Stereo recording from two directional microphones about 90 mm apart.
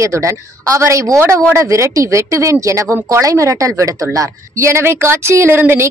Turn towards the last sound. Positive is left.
turn(degrees=-25)  # may be behind; listen again after turning